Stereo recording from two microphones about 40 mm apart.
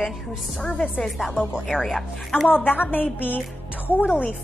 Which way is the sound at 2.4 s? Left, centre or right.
Left.